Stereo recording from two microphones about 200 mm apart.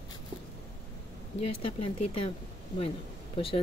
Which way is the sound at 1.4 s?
30° left (ahead or behind).